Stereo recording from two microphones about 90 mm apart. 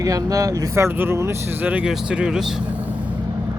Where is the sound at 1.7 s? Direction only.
10° right (ahead or behind).